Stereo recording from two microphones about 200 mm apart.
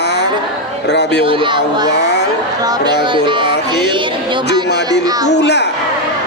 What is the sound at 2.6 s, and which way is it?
Speech, 20° right (ahead or behind).